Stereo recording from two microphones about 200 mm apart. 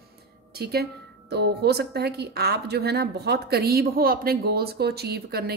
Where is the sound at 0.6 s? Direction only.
50° right (ahead or behind).